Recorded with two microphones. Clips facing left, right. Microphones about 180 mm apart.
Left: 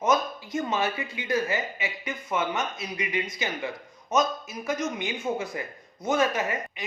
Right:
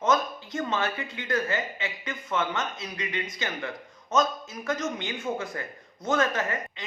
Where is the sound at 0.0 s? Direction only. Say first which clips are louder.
Left 1 dB; 15° left (ahead or behind).